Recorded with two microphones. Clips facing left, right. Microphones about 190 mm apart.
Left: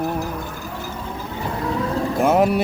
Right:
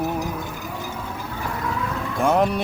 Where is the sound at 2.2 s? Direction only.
5° left (ahead or behind).